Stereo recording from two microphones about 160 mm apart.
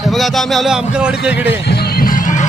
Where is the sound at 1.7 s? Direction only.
75° left (ahead or behind); by 2.4 s 55° left (ahead or behind).